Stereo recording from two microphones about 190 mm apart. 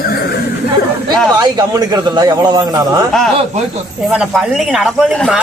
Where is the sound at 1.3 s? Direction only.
20° right (ahead or behind).